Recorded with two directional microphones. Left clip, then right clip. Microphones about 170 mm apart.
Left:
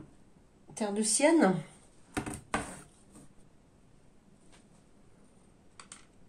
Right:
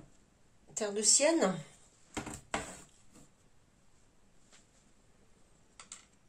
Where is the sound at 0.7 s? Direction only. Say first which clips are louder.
Right 1 dB; 35° right (ahead or behind).